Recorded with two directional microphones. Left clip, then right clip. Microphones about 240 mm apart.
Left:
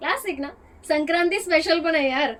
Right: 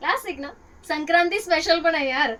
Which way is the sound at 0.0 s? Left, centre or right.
Centre.